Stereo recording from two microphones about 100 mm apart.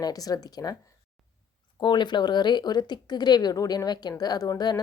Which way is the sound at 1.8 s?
50° left (ahead or behind).